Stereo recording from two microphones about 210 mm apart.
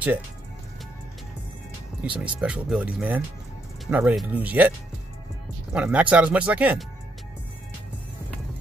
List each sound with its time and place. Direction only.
2.0 s speech: 5° right (ahead or behind)